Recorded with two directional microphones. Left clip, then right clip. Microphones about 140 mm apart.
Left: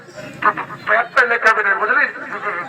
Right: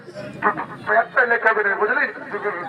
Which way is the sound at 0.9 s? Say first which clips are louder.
Left 2 dB; 30° right (ahead or behind).